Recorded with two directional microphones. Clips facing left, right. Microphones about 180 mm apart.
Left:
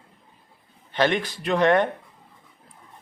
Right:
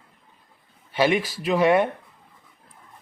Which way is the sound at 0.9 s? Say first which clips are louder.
Right 1 dB; 5° right (ahead or behind).